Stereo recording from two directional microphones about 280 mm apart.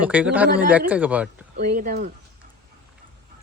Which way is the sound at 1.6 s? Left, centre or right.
Right.